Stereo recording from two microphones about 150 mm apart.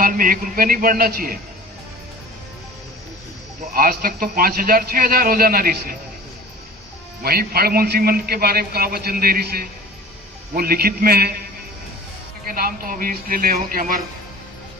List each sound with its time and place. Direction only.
0.0 s a man's voice: 70° right (ahead or behind)
3.8 s a man's voice: 75° right (ahead or behind)
7.2 s a man's voice: 90° right
12.5 s a man's voice: 75° right (ahead or behind)